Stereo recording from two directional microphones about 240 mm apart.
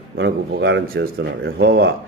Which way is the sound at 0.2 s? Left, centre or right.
Right.